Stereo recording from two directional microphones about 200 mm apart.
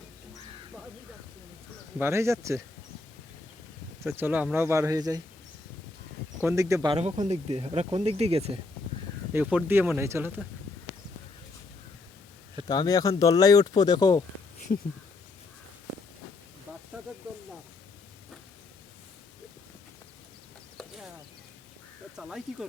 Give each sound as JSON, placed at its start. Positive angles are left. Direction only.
{"t": 2.0, "sound": "speech", "side_deg": -15}
{"t": 4.0, "sound": "speech", "side_deg": -10}
{"t": 6.4, "sound": "speech", "side_deg": -15}
{"t": 6.9, "sound": "speech", "side_deg": -30}
{"t": 9.3, "sound": "speech", "side_deg": -5}
{"t": 12.6, "sound": "speech", "side_deg": 20}
{"t": 14.7, "sound": "speech", "side_deg": 35}
{"t": 20.7, "sound": "a sound", "side_deg": 0}
{"t": 22.1, "sound": "a sound", "side_deg": -5}